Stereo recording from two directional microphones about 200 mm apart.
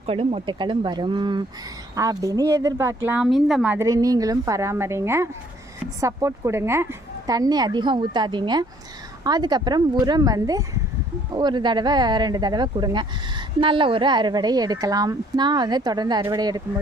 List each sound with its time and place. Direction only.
0.0 s speech: 30° right (ahead or behind)